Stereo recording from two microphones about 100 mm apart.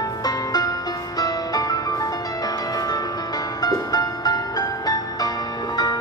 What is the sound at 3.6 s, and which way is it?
Music, 40° left (ahead or behind).